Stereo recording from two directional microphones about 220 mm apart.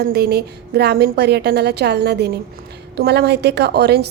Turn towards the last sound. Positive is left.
turn(degrees=-50)  # may be behind; listen again after turning